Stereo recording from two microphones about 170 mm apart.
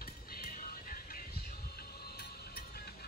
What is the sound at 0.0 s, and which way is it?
Music, 60° left (ahead or behind).